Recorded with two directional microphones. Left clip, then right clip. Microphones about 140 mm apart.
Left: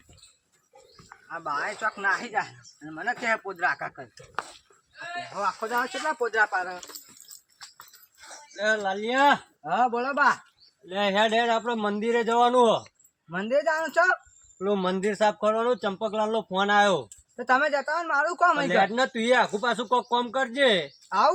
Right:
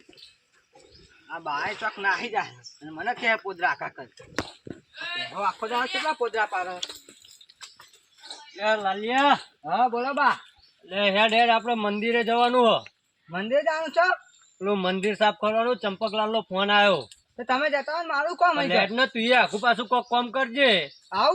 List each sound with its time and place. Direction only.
1.3 s a man's voice: 5° left (ahead or behind)
3.7 s a man's voice: centre (ahead or behind)
5.3 s speech: 20° left (ahead or behind)
5.6 s speech: 5° left (ahead or behind)
8.5 s speech: 45° left (ahead or behind)
9.6 s a man's voice: 5° left (ahead or behind)
10.9 s speech: 35° left (ahead or behind)
13.3 s a man's voice: centre (ahead or behind)
14.7 s speech: 40° left (ahead or behind)
17.3 s a man's voice: centre (ahead or behind)
18.9 s speech: 40° left (ahead or behind)
21.1 s speech: 5° right (ahead or behind)